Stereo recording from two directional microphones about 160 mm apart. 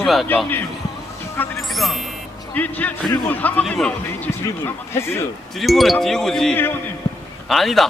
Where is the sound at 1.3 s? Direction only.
10° left (ahead or behind).